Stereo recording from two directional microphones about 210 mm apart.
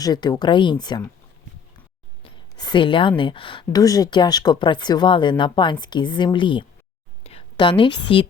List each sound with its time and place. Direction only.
0.0 s speech: 20° left (ahead or behind)
2.2 s a woman's voice: 20° left (ahead or behind)